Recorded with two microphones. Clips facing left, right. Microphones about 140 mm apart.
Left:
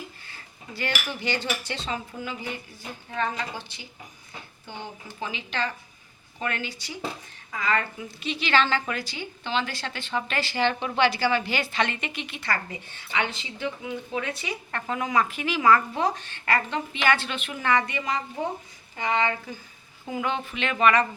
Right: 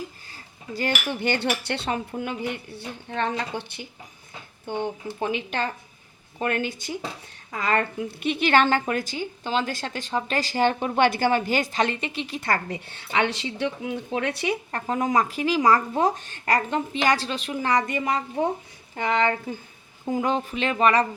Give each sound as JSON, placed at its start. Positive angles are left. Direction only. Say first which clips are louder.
{"t": 0.3, "sound": "dishes", "louder": "right 5 dB", "side_deg": -40}
{"t": 1.2, "sound": "a woman's voice", "louder": "right 5 dB", "side_deg": -60}
{"t": 13.1, "sound": "speech", "louder": "right 5 dB", "side_deg": -65}
{"t": 14.7, "sound": "speech", "louder": "right 1 dB", "side_deg": -35}
{"t": 18.4, "sound": "a woman's voice", "louder": "right 5 dB", "side_deg": -60}
{"t": 20.1, "sound": "speech", "louder": "right 5 dB", "side_deg": -35}